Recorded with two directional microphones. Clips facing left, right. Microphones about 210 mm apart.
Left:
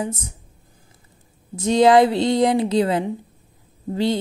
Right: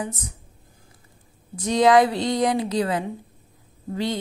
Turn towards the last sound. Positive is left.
turn(degrees=30)  # may be behind; listen again after turning